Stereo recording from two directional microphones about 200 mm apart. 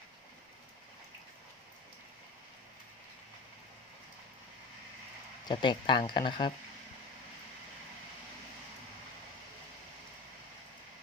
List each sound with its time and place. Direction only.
5.5 s speech: 25° left (ahead or behind)